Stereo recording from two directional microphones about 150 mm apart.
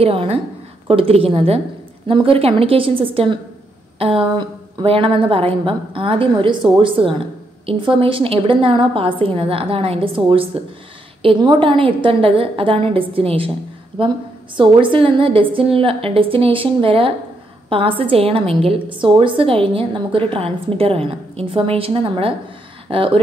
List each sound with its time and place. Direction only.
0.0 s a woman's voice: 40° right (ahead or behind)